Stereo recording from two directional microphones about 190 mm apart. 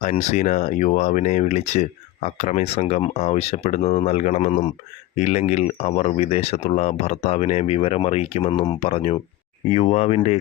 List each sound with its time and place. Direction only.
0.0 s speech: 40° left (ahead or behind)